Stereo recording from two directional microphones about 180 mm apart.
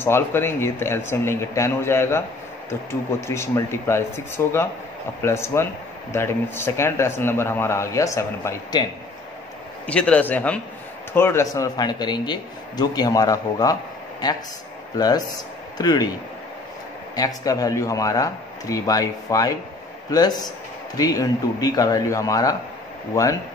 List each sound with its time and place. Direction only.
0.0 s a man's voice: 15° left (ahead or behind)
9.8 s a man's voice: 5° left (ahead or behind)
17.1 s a man's voice: 20° left (ahead or behind)